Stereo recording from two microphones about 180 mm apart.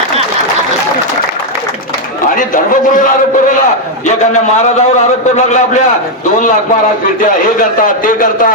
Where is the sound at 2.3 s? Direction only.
45° left (ahead or behind).